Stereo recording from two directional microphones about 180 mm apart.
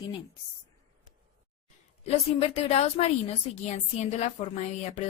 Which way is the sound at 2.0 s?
35° left (ahead or behind).